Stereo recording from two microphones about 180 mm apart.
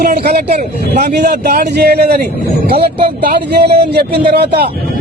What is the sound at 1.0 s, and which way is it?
A man's voice, 55° right (ahead or behind).